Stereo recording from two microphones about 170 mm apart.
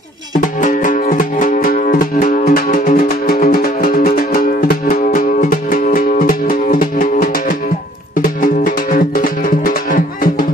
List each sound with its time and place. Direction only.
0.6 s music: 50° left (ahead or behind)